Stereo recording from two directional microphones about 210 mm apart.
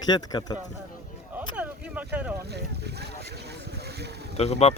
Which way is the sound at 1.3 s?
5° right (ahead or behind).